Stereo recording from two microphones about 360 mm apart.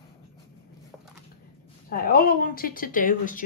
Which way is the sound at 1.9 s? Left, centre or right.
Left.